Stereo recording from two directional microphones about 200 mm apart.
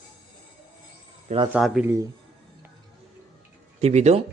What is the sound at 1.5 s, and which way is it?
Speech, 5° right (ahead or behind).